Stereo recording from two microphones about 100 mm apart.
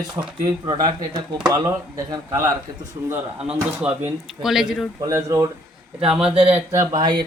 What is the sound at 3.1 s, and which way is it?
Speech, 10° right (ahead or behind).